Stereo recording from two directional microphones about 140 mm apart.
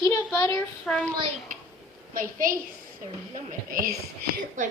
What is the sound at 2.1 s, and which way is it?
Speech, 90° right.